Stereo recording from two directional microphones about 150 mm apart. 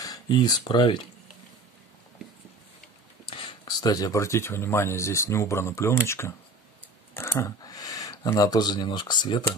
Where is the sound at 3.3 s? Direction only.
30° left (ahead or behind).